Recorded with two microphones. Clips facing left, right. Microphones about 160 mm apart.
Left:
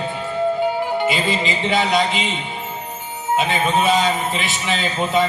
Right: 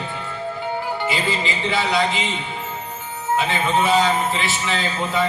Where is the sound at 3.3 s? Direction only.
20° left (ahead or behind).